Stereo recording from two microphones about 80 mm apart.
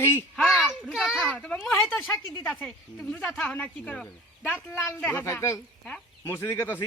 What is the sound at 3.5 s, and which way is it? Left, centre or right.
Speech, centre.